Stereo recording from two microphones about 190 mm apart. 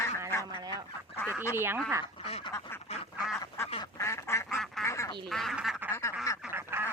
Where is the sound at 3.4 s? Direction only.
15° left (ahead or behind).